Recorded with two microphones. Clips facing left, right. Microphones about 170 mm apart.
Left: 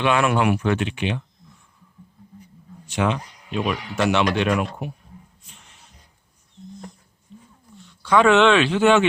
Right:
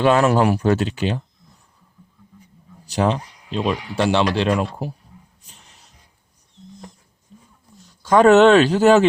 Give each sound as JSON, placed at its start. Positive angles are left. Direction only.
{"t": 0.0, "sound": "speech", "side_deg": -40}
{"t": 2.8, "sound": "speech", "side_deg": -35}
{"t": 5.4, "sound": "music", "side_deg": -35}
{"t": 7.8, "sound": "speech", "side_deg": -40}